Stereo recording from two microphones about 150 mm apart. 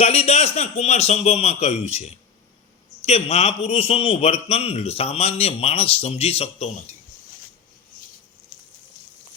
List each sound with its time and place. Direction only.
0.0 s a man's voice: 45° left (ahead or behind)